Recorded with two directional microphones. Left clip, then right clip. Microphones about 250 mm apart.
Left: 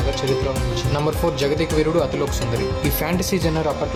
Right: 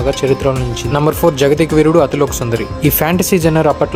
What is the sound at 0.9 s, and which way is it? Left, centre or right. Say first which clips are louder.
Speech: right 10 dB; right.